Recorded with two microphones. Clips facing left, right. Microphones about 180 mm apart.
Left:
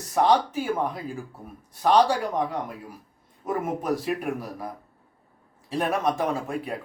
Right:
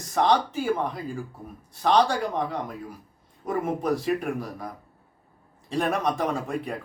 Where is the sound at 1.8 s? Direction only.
5° left (ahead or behind).